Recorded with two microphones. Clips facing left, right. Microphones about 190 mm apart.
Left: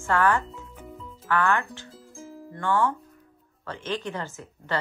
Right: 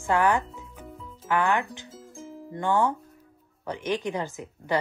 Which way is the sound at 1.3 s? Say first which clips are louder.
Even; 15° right (ahead or behind).